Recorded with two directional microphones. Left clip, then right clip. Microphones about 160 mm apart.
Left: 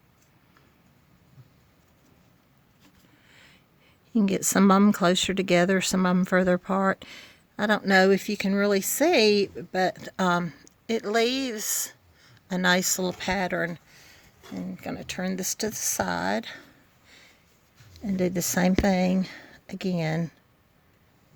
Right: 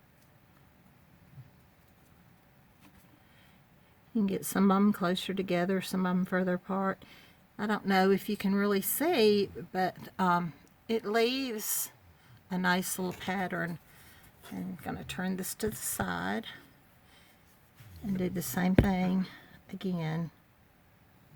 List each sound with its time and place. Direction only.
4.1 s speech: 65° left (ahead or behind)
18.0 s speech: 45° left (ahead or behind)